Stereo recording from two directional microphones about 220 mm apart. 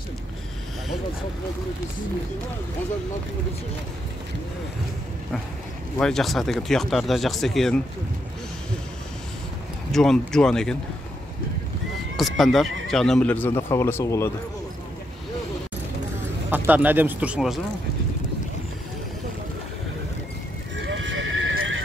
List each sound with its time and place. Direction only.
5.9 s speech: centre (ahead or behind)
9.9 s speech: centre (ahead or behind)
12.2 s speech: centre (ahead or behind)
16.4 s speech: 10° right (ahead or behind)
20.7 s neigh: 55° right (ahead or behind)